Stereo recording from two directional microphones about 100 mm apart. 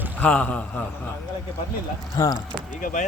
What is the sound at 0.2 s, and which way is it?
Speech, 15° left (ahead or behind).